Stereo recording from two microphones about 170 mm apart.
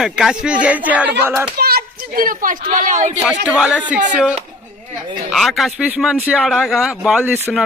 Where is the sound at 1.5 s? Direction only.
65° right (ahead or behind); by 3.2 s 45° right (ahead or behind).